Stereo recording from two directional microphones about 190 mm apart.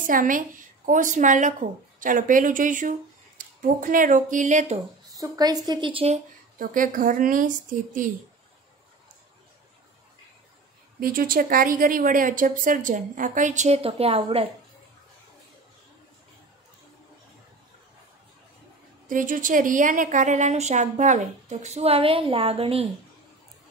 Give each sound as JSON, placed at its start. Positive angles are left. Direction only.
{"t": 0.0, "sound": "a woman's voice", "side_deg": -45}
{"t": 5.1, "sound": "a woman's voice", "side_deg": -20}
{"t": 11.0, "sound": "speech", "side_deg": -50}
{"t": 19.0, "sound": "a woman's voice", "side_deg": -45}